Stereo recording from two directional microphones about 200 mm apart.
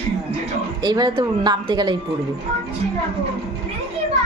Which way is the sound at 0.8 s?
20° right (ahead or behind).